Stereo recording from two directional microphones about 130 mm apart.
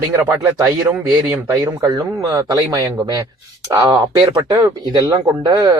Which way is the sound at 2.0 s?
25° right (ahead or behind).